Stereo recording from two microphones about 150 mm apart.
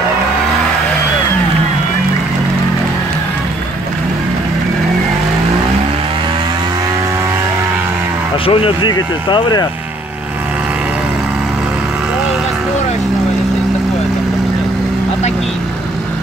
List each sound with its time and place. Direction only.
8.5 s speech: 35° left (ahead or behind)